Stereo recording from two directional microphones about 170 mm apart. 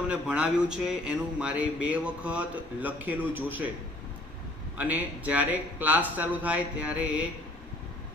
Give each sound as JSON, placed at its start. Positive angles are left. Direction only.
{"t": 0.1, "sound": "a man's voice", "side_deg": -5}
{"t": 4.7, "sound": "a man's voice", "side_deg": -10}